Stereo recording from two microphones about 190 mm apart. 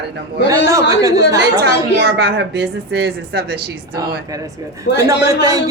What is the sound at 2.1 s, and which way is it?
A woman's voice, 60° right (ahead or behind).